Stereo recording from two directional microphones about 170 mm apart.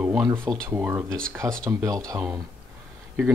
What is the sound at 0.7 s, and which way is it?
Speech, 10° right (ahead or behind).